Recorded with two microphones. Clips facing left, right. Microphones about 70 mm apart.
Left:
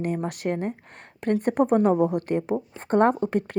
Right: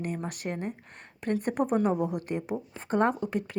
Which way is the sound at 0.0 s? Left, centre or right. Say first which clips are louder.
Left 7 dB; left.